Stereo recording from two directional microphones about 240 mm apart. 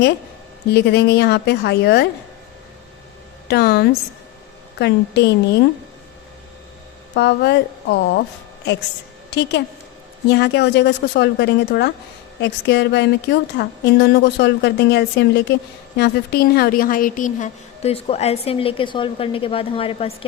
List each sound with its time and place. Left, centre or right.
0.7 s a woman's voice: left
3.5 s a woman's voice: left
7.1 s a woman's voice: left
9.3 s a woman's voice: left